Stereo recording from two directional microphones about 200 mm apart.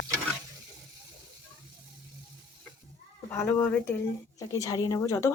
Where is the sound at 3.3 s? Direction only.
10° left (ahead or behind).